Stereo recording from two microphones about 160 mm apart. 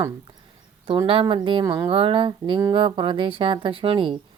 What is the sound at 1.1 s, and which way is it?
Speech, 35° right (ahead or behind).